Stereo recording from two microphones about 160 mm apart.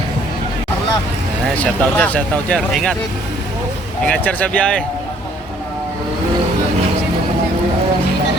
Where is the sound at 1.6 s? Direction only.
10° left (ahead or behind).